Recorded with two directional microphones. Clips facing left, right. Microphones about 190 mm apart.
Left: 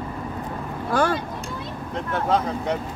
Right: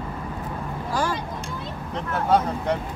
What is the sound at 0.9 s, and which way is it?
Speech, 60° left (ahead or behind).